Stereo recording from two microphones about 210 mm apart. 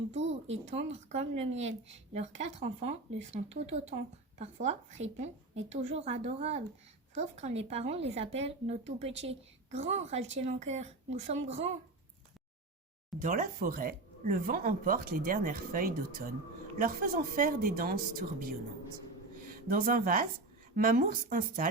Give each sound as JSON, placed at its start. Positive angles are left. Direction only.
{"t": 0.2, "sound": "speech", "side_deg": -60}
{"t": 0.7, "sound": "a woman's voice", "side_deg": -30}
{"t": 13.2, "sound": "a woman's voice", "side_deg": -40}
{"t": 19.6, "sound": "a woman's voice", "side_deg": -40}